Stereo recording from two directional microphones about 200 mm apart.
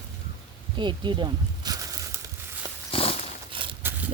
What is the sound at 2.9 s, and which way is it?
Walk, 30° left (ahead or behind).